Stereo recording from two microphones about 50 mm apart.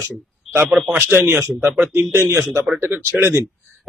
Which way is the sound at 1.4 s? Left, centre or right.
Right.